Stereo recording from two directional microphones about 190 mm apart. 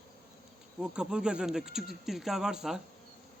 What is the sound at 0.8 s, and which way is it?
A man's voice, 5° right (ahead or behind).